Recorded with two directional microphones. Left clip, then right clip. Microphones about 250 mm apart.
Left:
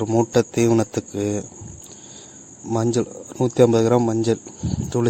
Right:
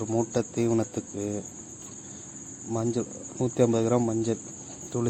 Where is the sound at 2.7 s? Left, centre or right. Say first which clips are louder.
Left 8 dB; left.